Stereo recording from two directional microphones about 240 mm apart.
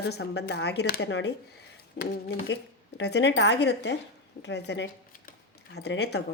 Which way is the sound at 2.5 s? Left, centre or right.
Left.